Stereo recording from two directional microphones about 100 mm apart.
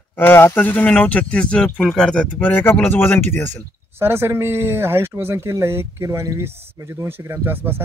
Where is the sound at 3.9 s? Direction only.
25° right (ahead or behind).